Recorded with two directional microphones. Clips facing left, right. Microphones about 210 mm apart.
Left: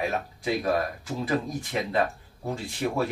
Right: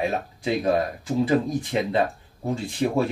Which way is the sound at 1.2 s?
25° right (ahead or behind).